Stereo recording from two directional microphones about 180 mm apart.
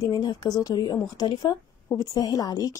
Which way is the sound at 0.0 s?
20° left (ahead or behind).